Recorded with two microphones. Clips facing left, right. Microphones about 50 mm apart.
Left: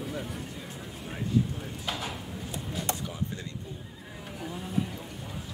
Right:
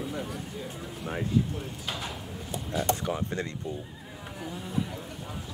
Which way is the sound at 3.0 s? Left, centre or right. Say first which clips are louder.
Right 5 dB; right.